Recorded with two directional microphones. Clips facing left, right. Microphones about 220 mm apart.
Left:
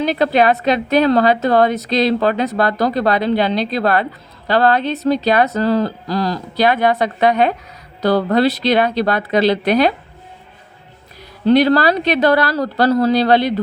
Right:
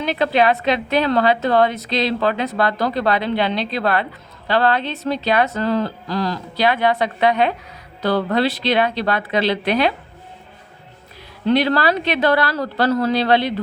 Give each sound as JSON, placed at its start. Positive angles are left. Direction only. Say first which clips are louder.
{"t": 0.0, "sound": "a woman's voice", "louder": "left 3 dB", "side_deg": 40}
{"t": 11.4, "sound": "a woman's voice", "louder": "left 5 dB", "side_deg": 40}